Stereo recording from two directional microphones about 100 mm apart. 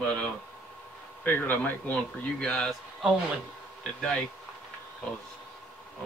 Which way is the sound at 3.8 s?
10° left (ahead or behind).